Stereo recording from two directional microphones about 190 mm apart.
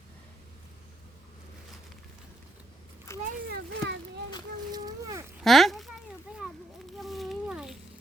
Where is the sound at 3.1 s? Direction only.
15° left (ahead or behind).